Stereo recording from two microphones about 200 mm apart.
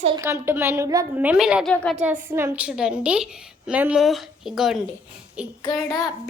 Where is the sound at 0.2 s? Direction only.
10° right (ahead or behind); by 2.0 s 5° left (ahead or behind).